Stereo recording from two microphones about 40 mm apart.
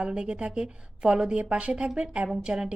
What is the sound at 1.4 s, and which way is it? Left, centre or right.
A woman's voice, right.